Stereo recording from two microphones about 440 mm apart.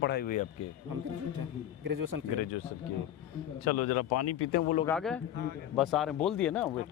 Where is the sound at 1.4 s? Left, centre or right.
Right.